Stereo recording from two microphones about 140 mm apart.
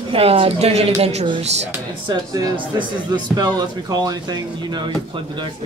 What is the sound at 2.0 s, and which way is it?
A man's voice, 30° right (ahead or behind).